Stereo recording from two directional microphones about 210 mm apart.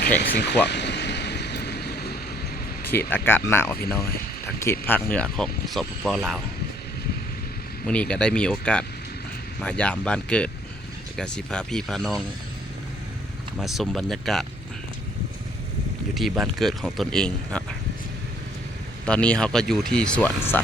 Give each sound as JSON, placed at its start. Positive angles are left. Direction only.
{"t": 0.2, "sound": "vehicle", "side_deg": 55}
{"t": 2.8, "sound": "speech", "side_deg": 10}
{"t": 3.8, "sound": "speech", "side_deg": 45}
{"t": 4.4, "sound": "speech", "side_deg": 10}
{"t": 7.9, "sound": "speech", "side_deg": 5}
{"t": 13.6, "sound": "speech", "side_deg": 0}
{"t": 16.1, "sound": "speech", "side_deg": 0}
{"t": 19.0, "sound": "speech", "side_deg": 5}